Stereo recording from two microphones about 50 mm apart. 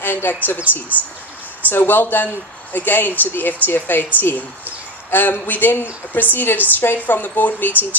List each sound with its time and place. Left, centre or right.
0.0 s a woman's voice: left
1.7 s speech: left